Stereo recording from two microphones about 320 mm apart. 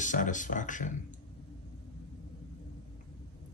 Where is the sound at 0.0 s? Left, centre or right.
Left.